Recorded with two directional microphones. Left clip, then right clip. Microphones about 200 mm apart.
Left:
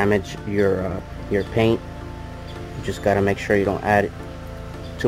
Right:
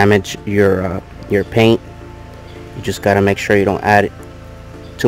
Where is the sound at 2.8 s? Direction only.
65° right (ahead or behind).